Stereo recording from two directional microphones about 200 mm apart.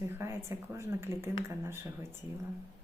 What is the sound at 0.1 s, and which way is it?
A woman's voice, 10° right (ahead or behind).